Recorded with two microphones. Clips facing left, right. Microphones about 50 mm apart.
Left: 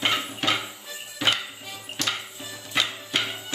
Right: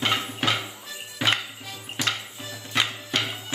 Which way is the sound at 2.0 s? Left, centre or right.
Centre.